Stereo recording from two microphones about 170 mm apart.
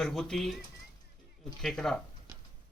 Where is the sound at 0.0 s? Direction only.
5° left (ahead or behind).